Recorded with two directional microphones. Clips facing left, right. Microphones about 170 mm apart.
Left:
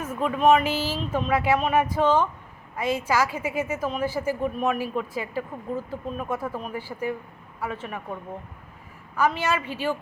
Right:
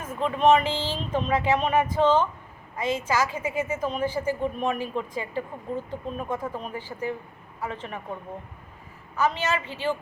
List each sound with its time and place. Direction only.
0.0 s a sound: 10° left (ahead or behind)
0.3 s speech: 5° left (ahead or behind)
9.4 s speech: 10° left (ahead or behind)